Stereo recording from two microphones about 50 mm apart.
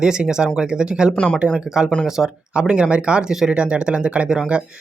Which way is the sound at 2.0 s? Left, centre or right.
Centre.